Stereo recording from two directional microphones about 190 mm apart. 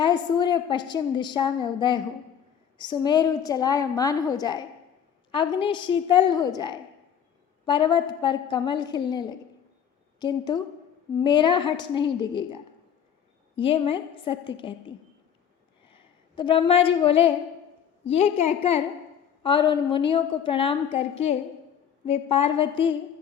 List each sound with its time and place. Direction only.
0.0 s a woman's voice: 25° left (ahead or behind)
13.6 s a woman's voice: 30° left (ahead or behind)